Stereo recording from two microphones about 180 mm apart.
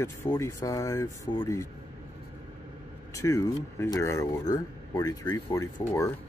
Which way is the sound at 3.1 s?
15° left (ahead or behind).